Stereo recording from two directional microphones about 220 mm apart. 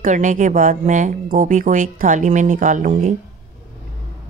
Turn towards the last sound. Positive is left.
turn(degrees=-35)  # may be behind; listen again after turning